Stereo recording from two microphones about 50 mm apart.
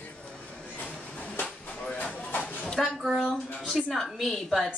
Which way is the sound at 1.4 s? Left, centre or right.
Left.